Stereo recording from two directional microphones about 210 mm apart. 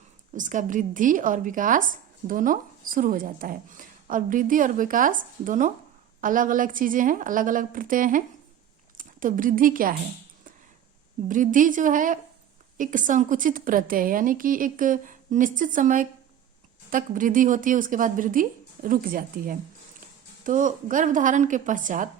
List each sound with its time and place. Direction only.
0.3 s a woman's voice: 40° right (ahead or behind)
11.3 s speech: 40° right (ahead or behind)